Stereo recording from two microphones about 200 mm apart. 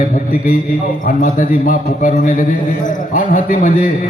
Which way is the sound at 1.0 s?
40° left (ahead or behind).